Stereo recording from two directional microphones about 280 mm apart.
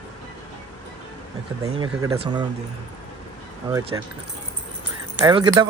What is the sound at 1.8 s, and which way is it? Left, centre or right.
Speech, centre.